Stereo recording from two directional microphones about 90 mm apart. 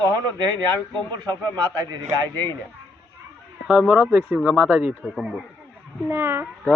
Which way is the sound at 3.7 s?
10° right (ahead or behind).